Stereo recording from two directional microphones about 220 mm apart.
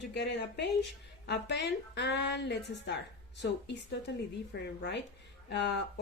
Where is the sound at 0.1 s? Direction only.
50° left (ahead or behind).